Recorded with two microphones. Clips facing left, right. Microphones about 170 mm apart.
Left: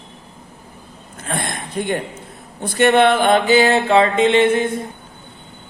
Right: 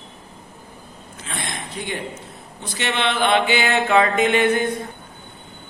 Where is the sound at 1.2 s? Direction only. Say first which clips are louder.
Left 6 dB; 55° left (ahead or behind).